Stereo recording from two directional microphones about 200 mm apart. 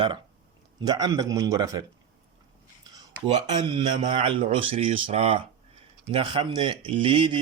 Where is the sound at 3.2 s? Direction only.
25° right (ahead or behind).